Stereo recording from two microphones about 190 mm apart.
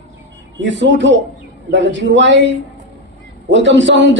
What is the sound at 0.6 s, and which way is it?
A man's voice, 75° right (ahead or behind).